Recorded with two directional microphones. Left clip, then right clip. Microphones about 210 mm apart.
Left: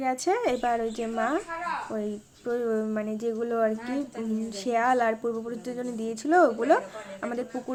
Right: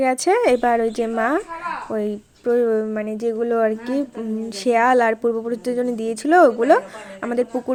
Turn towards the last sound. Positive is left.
turn(degrees=-30)  # may be behind; listen again after turning